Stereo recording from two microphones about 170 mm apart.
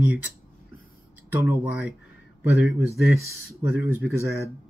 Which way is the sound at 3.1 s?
15° right (ahead or behind).